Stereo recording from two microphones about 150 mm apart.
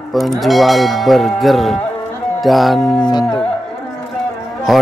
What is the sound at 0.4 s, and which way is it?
Speech, centre (ahead or behind).